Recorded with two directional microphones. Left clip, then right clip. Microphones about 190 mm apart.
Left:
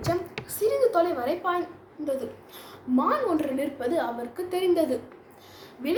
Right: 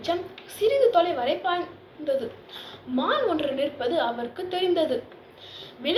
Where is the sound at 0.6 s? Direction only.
25° left (ahead or behind).